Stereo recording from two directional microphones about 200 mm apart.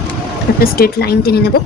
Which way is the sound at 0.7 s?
50° left (ahead or behind).